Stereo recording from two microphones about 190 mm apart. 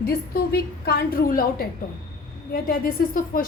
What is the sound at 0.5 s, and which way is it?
A woman's voice, 55° left (ahead or behind).